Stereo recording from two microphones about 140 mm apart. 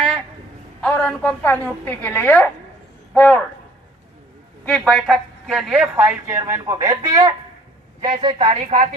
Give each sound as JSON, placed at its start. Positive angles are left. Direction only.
{"t": 0.8, "sound": "a woman's voice", "side_deg": 10}
{"t": 4.6, "sound": "a woman's voice", "side_deg": 5}
{"t": 8.0, "sound": "a woman's voice", "side_deg": -40}